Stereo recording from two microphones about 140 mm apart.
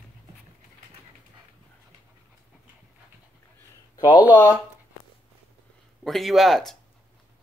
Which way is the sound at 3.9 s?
30° left (ahead or behind).